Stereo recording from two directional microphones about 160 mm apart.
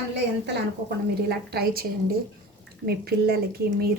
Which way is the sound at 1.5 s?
80° right.